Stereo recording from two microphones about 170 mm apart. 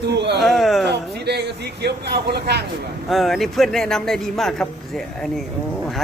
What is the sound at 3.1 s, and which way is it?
A man's voice, centre (ahead or behind).